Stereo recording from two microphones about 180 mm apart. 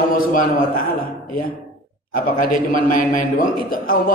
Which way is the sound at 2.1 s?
50° left (ahead or behind).